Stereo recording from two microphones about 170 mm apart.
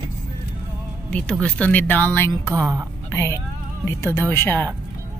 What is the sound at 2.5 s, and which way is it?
Speech, 20° right (ahead or behind).